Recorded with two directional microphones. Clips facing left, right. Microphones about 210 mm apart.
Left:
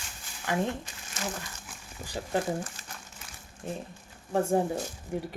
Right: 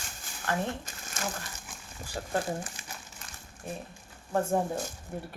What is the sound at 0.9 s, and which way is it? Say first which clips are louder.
Crumpling: right 1 dB; 45° right (ahead or behind).